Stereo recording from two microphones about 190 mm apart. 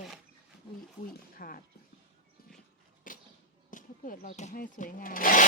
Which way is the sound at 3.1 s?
45° left (ahead or behind).